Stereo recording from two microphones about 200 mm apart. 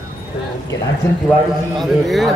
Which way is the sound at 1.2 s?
Centre (ahead or behind).